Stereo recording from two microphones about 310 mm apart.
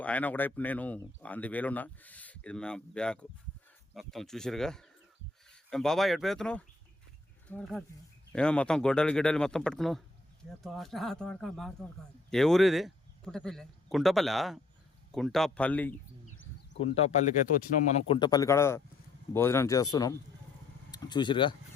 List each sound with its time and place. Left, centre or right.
0.0 s speech: centre
16.7 s speech: centre